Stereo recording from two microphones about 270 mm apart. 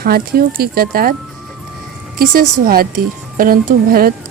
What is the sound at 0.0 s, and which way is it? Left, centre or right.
Speech, right.